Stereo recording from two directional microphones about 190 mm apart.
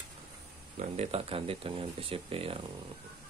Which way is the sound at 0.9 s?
30° right (ahead or behind).